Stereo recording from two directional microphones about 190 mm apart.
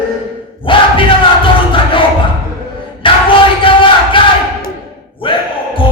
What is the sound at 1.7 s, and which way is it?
Music, 25° left (ahead or behind).